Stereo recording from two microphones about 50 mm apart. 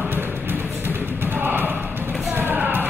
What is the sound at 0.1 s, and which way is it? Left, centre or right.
Music, right.